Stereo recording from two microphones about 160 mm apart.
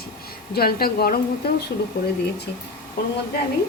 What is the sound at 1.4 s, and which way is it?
Speech, 80° left.